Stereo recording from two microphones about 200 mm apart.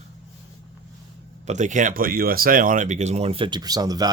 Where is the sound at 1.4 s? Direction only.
35° right (ahead or behind).